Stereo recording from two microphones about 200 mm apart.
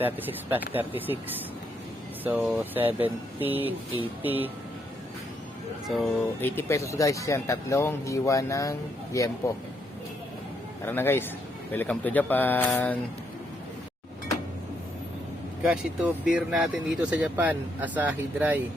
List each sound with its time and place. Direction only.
0.0 s speech: 10° right (ahead or behind)
2.2 s speech: 5° right (ahead or behind)
5.9 s speech: centre (ahead or behind)
6.6 s speech: 15° left (ahead or behind)
10.8 s speech: 10° left (ahead or behind)
15.6 s speech: 5° right (ahead or behind)